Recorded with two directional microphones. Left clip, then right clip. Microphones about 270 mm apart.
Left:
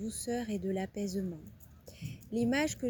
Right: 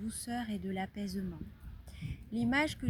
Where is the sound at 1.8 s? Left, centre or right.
Right.